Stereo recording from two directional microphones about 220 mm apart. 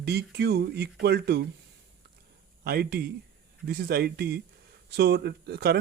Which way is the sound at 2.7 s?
45° right (ahead or behind).